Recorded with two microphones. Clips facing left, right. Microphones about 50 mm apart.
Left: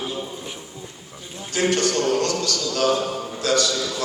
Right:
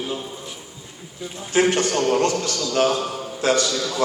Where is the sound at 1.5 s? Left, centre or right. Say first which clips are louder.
Right 2 dB; right.